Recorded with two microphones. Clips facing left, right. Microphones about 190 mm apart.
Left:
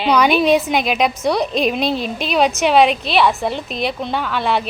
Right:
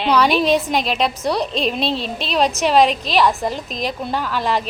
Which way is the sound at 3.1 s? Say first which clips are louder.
Even; 5° left (ahead or behind).